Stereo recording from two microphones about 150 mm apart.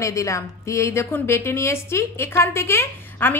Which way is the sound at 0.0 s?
20° left (ahead or behind).